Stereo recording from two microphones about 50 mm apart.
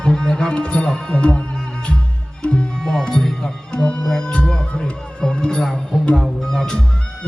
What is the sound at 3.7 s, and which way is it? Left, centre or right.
Music, left.